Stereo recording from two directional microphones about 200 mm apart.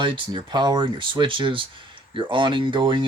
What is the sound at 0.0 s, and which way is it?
Speech, 25° right (ahead or behind).